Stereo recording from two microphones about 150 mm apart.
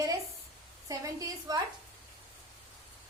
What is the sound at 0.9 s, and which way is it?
Speech, 20° right (ahead or behind).